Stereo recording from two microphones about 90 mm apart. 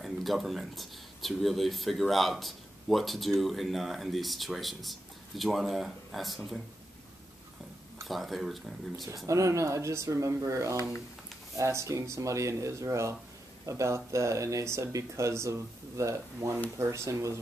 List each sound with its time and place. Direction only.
0.0 s speech: centre (ahead or behind)
8.1 s speech: centre (ahead or behind)
9.1 s speech: 40° right (ahead or behind)